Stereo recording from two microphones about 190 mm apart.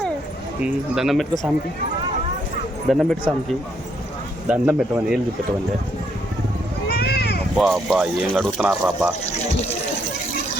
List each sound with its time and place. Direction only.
0.6 s speech: centre (ahead or behind)
2.9 s speech: centre (ahead or behind)
4.4 s a man's voice: 10° right (ahead or behind)
6.8 s a sound: 55° left (ahead or behind)
7.5 s speech: centre (ahead or behind)